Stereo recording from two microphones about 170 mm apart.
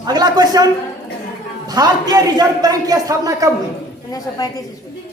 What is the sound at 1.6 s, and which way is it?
A woman's voice, 25° right (ahead or behind).